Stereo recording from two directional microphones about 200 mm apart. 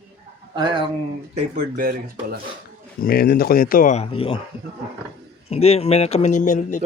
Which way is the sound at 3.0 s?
50° left (ahead or behind).